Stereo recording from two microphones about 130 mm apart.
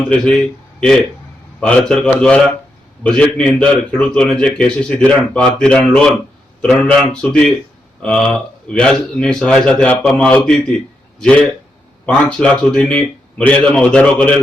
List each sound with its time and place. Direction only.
0.1 s a man's voice: 5° left (ahead or behind)